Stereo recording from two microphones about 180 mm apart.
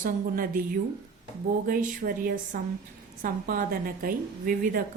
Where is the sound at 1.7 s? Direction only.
50° right (ahead or behind).